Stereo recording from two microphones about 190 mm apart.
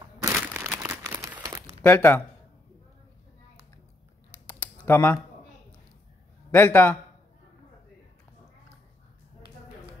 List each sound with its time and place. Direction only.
0.2 s crumpling: 15° right (ahead or behind)
1.8 s speech: 10° left (ahead or behind)
4.8 s speech: 10° left (ahead or behind)
6.5 s a man's voice: 10° left (ahead or behind)